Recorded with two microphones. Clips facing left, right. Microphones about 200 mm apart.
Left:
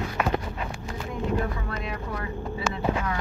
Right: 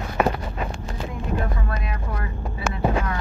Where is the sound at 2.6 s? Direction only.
55° right (ahead or behind).